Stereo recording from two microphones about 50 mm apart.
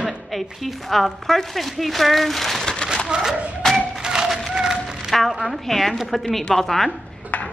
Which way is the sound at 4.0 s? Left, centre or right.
Centre.